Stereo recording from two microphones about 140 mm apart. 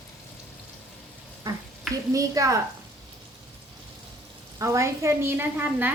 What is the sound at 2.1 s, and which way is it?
Speech, 25° right (ahead or behind).